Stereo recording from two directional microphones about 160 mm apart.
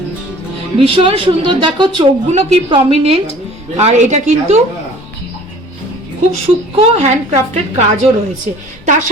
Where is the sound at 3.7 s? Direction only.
45° right (ahead or behind).